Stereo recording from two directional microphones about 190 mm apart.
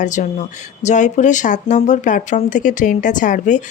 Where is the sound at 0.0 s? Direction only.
40° left (ahead or behind).